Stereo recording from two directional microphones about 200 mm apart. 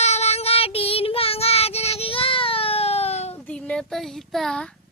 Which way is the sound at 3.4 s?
5° left (ahead or behind).